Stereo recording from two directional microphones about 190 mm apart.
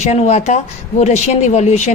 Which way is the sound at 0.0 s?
35° left (ahead or behind).